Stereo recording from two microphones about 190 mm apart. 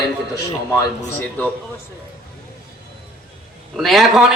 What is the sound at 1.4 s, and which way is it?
Speech, 10° left (ahead or behind).